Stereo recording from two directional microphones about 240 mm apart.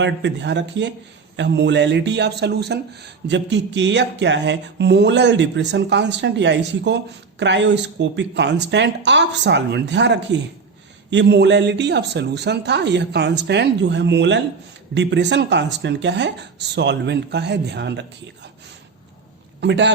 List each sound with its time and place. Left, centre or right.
0.0 s speech: right
19.6 s speech: right